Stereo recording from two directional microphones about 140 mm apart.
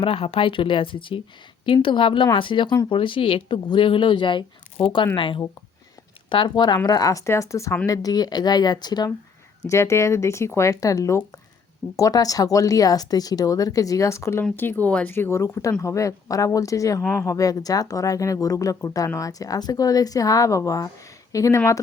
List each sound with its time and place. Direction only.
0.0 s speech: 40° left (ahead or behind); by 17.0 s 25° left (ahead or behind)
17.0 s speech: 10° left (ahead or behind)
17.2 s speech: 25° left (ahead or behind)